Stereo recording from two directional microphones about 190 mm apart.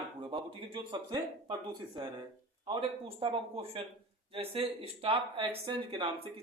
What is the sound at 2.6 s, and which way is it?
Speech, 25° right (ahead or behind).